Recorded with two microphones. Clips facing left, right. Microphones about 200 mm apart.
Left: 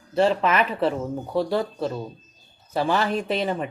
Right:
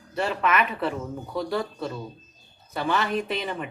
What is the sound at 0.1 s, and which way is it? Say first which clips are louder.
Speech: left 5 dB; 30° left (ahead or behind).